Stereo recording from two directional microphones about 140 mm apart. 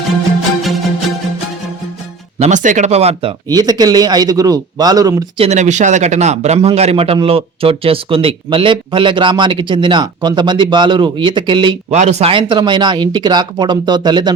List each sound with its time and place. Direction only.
2.4 s speech: 65° right (ahead or behind); by 3.3 s 45° right (ahead or behind)
3.5 s speech: 30° right (ahead or behind)
5.4 s speech: 55° right (ahead or behind); by 11.8 s 35° right (ahead or behind)
11.9 s speech: 55° right (ahead or behind)
12.3 s speech: 35° right (ahead or behind)